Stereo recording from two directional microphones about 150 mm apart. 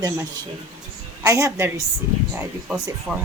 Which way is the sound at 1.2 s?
20° right (ahead or behind).